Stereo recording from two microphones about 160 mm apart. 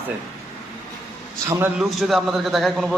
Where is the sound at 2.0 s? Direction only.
Centre (ahead or behind).